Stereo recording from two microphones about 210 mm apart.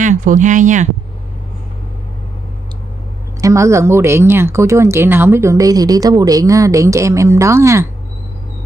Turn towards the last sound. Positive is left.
turn(degrees=-15)  # may be behind; listen again after turning